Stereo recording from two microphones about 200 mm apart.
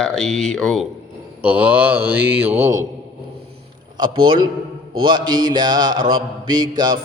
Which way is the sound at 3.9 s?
25° right (ahead or behind).